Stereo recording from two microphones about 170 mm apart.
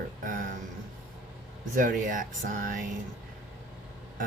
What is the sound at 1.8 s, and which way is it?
Speech, 50° right (ahead or behind).